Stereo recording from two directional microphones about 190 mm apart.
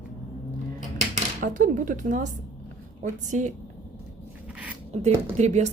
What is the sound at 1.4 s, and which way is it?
A woman's voice, 45° right (ahead or behind).